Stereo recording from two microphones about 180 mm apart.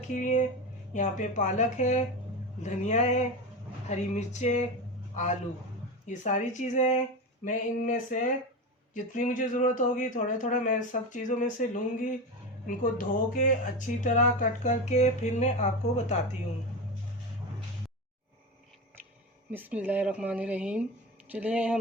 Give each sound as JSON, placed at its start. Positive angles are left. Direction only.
{"t": 0.1, "sound": "speech", "side_deg": 45}
{"t": 6.1, "sound": "speech", "side_deg": 45}
{"t": 19.5, "sound": "speech", "side_deg": -10}